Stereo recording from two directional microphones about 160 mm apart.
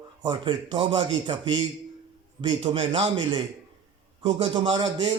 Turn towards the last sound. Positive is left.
turn(degrees=-30)  # may be behind; listen again after turning